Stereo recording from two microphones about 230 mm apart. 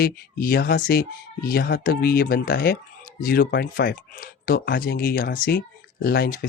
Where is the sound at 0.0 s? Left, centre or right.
Left.